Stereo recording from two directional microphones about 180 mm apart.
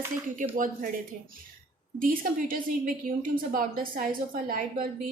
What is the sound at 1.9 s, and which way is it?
A woman's voice, 50° right (ahead or behind).